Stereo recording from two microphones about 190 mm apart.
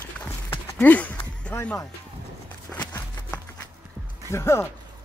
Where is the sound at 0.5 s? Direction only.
10° left (ahead or behind).